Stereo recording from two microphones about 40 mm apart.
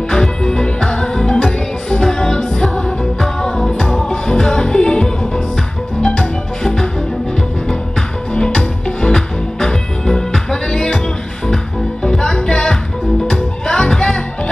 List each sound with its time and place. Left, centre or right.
0.1 s music: centre
8.5 s music: centre